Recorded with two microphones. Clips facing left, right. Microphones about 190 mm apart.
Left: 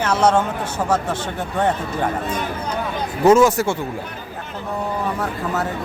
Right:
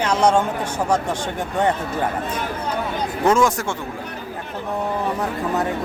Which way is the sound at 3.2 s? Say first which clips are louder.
Left 5 dB; 5° left (ahead or behind).